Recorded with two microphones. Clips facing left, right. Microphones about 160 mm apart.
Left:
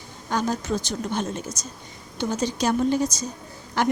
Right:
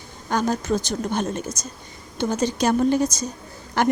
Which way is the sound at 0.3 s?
50° right (ahead or behind).